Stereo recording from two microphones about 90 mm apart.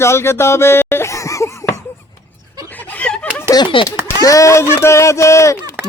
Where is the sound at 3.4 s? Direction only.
45° left (ahead or behind).